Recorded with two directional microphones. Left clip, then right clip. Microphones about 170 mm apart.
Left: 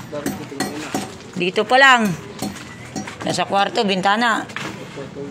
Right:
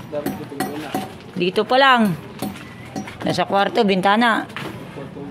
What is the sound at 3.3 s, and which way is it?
Speech, 40° right (ahead or behind).